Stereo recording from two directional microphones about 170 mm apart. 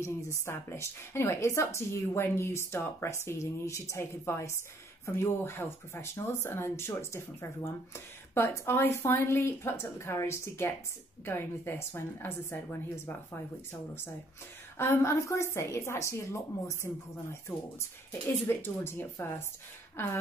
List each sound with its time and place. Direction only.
0.0 s a woman's voice: 15° left (ahead or behind)
14.8 s a woman's voice: 15° left (ahead or behind)